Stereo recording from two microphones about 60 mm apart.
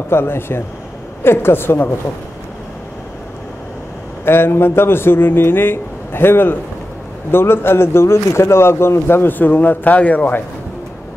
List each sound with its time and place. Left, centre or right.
0.1 s a man's voice: left
4.2 s a man's voice: left